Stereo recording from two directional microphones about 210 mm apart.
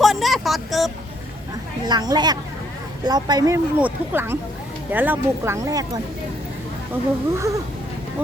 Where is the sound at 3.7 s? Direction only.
10° right (ahead or behind).